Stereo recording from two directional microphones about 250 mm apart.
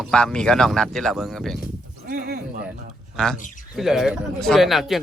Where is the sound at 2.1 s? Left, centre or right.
Right.